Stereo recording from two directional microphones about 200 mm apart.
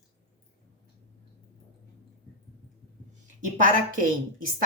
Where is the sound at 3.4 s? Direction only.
40° right (ahead or behind).